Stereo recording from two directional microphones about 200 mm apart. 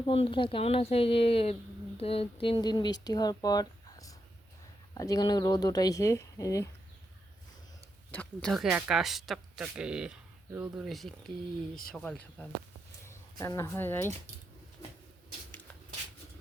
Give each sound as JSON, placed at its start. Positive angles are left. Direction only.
{"t": 0.0, "sound": "speech", "side_deg": 25}
{"t": 8.1, "sound": "speech", "side_deg": 5}
{"t": 13.1, "sound": "speech", "side_deg": 15}